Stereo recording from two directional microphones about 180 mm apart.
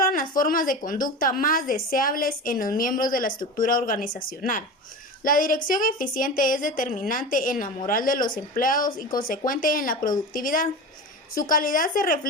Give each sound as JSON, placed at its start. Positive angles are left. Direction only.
{"t": 0.0, "sound": "a woman's voice", "side_deg": 50}